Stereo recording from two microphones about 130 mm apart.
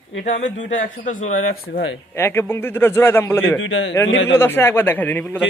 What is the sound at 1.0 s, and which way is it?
Speech, 85° left.